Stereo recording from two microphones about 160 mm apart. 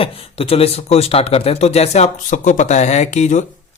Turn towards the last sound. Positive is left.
turn(degrees=45)  # may be behind; listen again after turning